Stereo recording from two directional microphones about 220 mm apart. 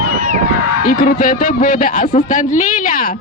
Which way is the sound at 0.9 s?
40° left (ahead or behind).